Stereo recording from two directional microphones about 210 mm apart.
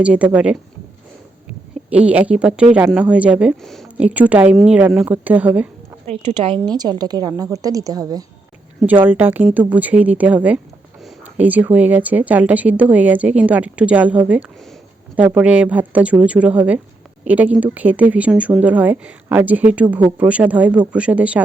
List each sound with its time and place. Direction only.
0.0 s speech: 5° right (ahead or behind)
1.9 s speech: 5° right (ahead or behind)
6.1 s a woman's voice: 25° right (ahead or behind); by 21.4 s 5° right (ahead or behind)